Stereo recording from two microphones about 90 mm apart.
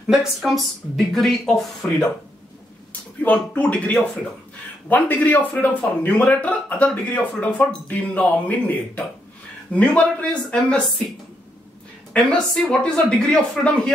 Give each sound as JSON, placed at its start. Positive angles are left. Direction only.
{"t": 0.1, "sound": "a man's voice", "side_deg": -5}
{"t": 12.1, "sound": "a man's voice", "side_deg": 10}